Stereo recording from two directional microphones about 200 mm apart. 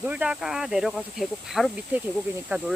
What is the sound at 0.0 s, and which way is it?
Speech, 5° right (ahead or behind).